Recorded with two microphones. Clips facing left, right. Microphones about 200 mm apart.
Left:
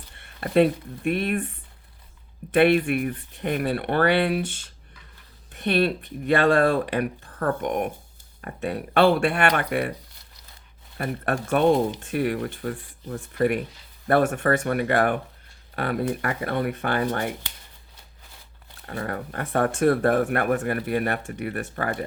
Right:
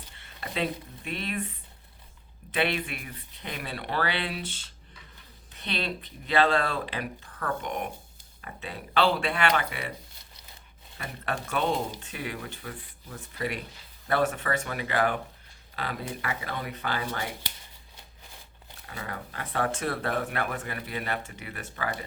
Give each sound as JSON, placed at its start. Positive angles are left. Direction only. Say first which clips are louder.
{"t": 0.1, "sound": "speech", "louder": "left 13 dB", "side_deg": 55}
{"t": 10.9, "sound": "speech", "louder": "left 8 dB", "side_deg": 55}
{"t": 18.9, "sound": "speech", "louder": "left 8 dB", "side_deg": 55}